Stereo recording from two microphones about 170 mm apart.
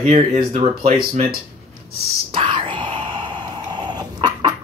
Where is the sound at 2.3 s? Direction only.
30° right (ahead or behind).